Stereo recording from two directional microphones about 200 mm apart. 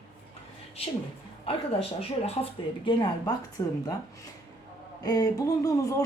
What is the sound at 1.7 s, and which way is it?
Speech, 30° left (ahead or behind).